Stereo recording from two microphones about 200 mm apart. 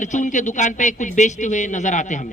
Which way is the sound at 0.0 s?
40° left (ahead or behind).